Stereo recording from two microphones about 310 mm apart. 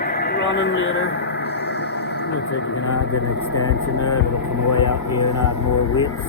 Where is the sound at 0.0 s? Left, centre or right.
Left.